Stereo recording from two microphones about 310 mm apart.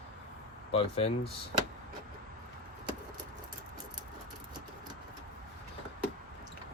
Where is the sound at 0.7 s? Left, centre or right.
Centre.